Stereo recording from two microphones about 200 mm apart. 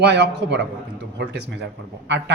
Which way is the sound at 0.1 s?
60° right (ahead or behind).